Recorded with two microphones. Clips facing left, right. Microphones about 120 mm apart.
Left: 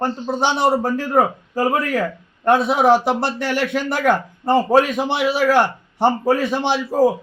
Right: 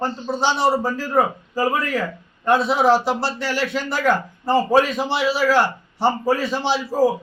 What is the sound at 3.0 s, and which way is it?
Speech, 55° left (ahead or behind).